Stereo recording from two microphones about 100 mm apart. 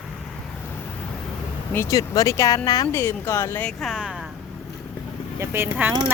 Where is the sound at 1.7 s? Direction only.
30° left (ahead or behind).